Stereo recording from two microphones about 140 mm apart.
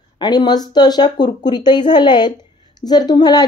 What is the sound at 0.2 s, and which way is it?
A woman's voice, 30° left (ahead or behind).